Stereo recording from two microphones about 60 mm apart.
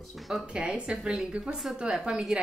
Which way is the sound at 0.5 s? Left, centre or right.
Centre.